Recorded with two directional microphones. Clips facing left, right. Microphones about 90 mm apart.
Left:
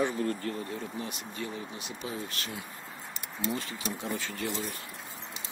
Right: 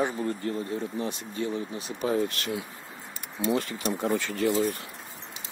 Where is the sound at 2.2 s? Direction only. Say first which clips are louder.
Right 7 dB; 70° right (ahead or behind).